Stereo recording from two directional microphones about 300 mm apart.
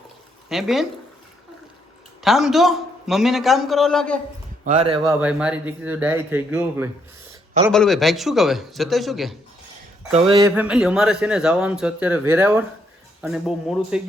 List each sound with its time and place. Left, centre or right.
0.4 s speech: centre
2.2 s speech: centre
4.6 s speech: right
5.2 s speech: centre
10.1 s speech: centre